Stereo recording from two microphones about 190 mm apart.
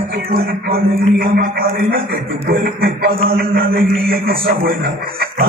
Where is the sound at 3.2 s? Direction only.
55° right (ahead or behind).